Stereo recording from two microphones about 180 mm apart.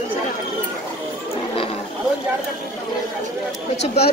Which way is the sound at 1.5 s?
30° left (ahead or behind).